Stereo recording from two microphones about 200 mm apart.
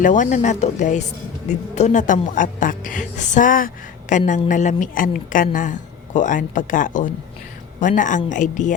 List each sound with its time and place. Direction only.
0.0 s a woman's voice: 40° left (ahead or behind)